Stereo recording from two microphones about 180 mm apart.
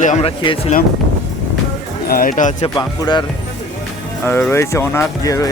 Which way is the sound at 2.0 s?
50° left (ahead or behind).